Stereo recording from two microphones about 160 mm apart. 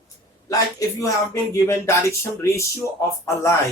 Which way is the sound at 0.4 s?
20° left (ahead or behind).